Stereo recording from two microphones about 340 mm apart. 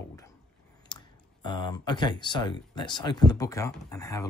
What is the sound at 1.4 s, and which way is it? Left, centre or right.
Speech, centre.